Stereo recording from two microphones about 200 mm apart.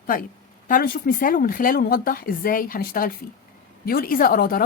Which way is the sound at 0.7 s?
45° left (ahead or behind).